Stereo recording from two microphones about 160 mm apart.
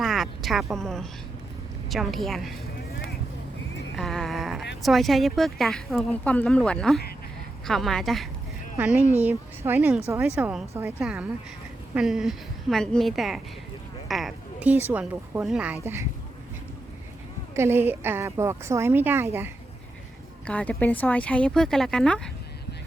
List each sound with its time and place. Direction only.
0.0 s a sound: centre (ahead or behind)
0.7 s speech: 5° left (ahead or behind)
3.9 s a sound: centre (ahead or behind)
4.8 s speech: centre (ahead or behind)
9.1 s a woman's voice: 15° right (ahead or behind)
17.5 s a woman's voice: 15° right (ahead or behind)
20.5 s speech: 10° left (ahead or behind)